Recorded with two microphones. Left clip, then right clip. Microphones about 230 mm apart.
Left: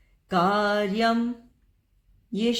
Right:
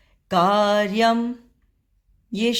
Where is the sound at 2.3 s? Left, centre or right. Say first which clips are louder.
Right 3 dB; right.